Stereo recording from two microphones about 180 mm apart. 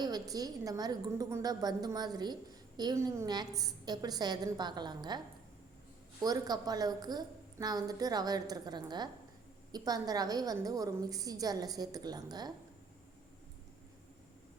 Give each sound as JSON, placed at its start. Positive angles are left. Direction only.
{"t": 0.0, "sound": "a woman's voice", "side_deg": -20}
{"t": 6.2, "sound": "a woman's voice", "side_deg": -20}